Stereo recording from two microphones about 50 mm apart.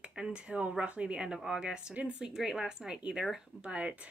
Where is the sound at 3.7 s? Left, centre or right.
Right.